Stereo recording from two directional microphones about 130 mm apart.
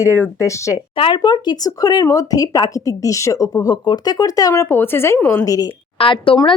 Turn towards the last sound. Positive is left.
turn(degrees=40)  # may be behind; listen again after turning